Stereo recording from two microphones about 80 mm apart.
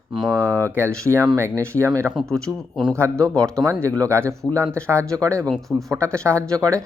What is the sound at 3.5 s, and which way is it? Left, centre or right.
Speech, right.